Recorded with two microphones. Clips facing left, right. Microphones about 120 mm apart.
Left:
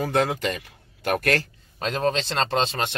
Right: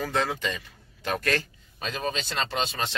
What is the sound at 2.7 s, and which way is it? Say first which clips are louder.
Speech: left 4 dB; 60° left (ahead or behind).